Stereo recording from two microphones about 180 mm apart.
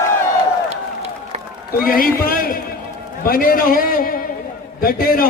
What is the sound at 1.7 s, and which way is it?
A man's voice, 55° left (ahead or behind).